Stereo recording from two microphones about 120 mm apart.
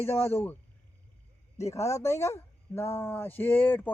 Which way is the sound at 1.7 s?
25° left (ahead or behind).